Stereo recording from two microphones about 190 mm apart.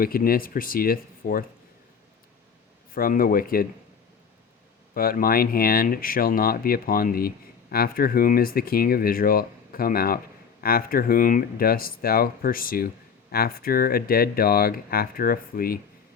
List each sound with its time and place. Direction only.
0.0 s speech: 50° left (ahead or behind)
2.9 s speech: 50° left (ahead or behind)
4.9 s speech: 50° left (ahead or behind)